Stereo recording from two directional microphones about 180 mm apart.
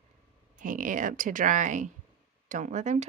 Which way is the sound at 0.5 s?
50° right (ahead or behind).